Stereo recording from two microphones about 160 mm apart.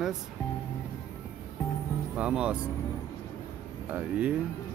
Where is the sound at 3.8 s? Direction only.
10° right (ahead or behind).